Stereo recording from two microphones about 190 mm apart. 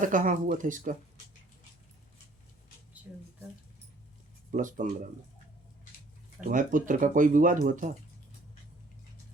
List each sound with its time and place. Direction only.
0.0 s speech: 45° right (ahead or behind)
3.1 s speech: 5° right (ahead or behind)
4.5 s speech: 45° right (ahead or behind)
6.5 s speech: 45° right (ahead or behind)